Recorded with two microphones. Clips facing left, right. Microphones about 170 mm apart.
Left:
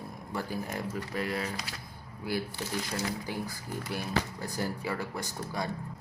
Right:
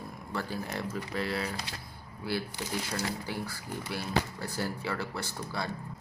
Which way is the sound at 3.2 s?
15° left (ahead or behind).